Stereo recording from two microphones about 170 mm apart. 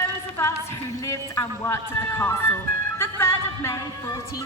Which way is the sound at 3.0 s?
15° left (ahead or behind).